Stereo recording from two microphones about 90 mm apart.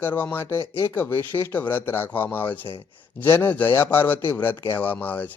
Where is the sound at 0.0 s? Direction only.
20° left (ahead or behind).